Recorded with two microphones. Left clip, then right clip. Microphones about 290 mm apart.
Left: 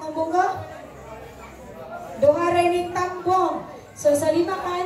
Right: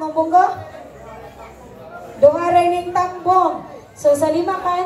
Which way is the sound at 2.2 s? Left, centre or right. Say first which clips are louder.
Right 5 dB; centre.